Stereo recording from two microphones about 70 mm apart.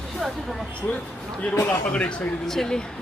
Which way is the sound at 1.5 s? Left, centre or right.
Left.